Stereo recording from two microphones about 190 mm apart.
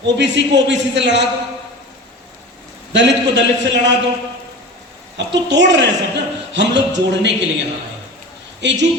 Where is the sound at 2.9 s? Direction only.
70° right (ahead or behind).